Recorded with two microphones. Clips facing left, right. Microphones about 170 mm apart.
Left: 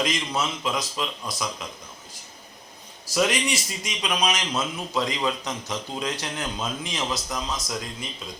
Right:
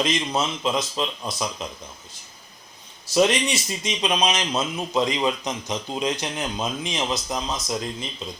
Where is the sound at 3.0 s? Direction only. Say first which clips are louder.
Right 4 dB; 25° right (ahead or behind).